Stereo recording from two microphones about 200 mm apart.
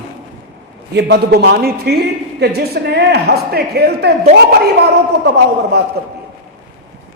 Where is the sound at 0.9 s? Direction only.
55° right (ahead or behind).